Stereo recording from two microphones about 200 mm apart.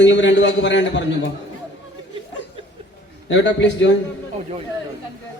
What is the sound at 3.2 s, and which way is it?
Speech, 65° left (ahead or behind).